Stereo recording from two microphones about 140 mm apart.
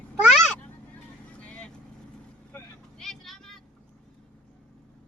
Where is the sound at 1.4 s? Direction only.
10° left (ahead or behind).